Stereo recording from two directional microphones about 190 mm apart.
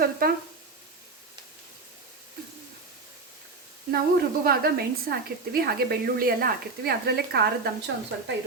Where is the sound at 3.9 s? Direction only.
55° right (ahead or behind).